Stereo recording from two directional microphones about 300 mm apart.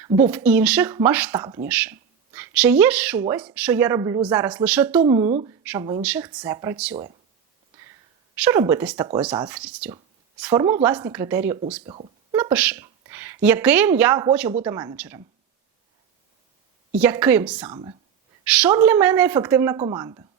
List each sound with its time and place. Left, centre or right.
0.2 s speech: centre
5.0 s speech: centre
8.4 s speech: centre
11.9 s a sound: centre
12.4 s speech: centre
16.9 s speech: centre
17.7 s speech: centre
18.4 s speech: centre